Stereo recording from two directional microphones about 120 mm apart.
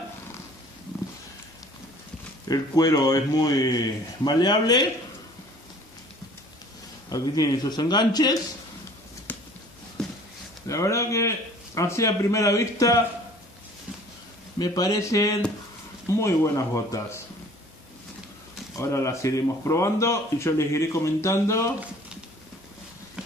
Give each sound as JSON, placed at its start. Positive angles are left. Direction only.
{"t": 2.4, "sound": "a man's voice", "side_deg": 30}
{"t": 7.1, "sound": "a man's voice", "side_deg": 30}
{"t": 9.3, "sound": "a sound", "side_deg": 15}
{"t": 10.7, "sound": "speech", "side_deg": 25}
{"t": 14.6, "sound": "speech", "side_deg": 30}
{"t": 18.8, "sound": "speech", "side_deg": 25}